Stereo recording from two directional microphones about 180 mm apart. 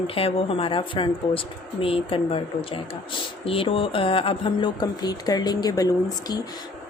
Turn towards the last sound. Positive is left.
turn(degrees=20)  # may be behind; listen again after turning